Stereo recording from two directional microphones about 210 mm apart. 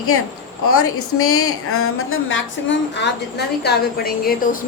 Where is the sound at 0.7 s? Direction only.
90° left.